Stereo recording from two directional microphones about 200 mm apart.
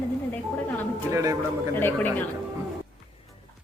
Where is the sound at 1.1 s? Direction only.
15° right (ahead or behind).